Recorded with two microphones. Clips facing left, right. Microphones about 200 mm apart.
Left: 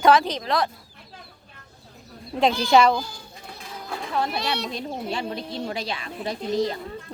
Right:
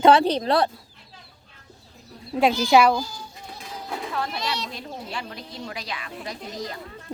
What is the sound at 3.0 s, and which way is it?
Speech, 60° left (ahead or behind).